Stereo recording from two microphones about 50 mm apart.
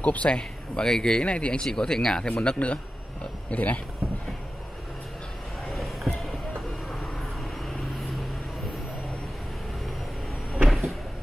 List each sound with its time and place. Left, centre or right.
0.0 s speech: left
2.4 s a man's voice: left
10.5 s cupboard open or close: centre